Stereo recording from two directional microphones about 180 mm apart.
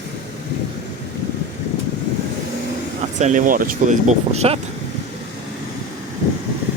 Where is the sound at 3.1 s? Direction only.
45° right (ahead or behind).